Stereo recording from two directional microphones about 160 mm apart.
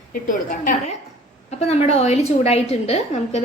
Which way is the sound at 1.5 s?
40° left (ahead or behind).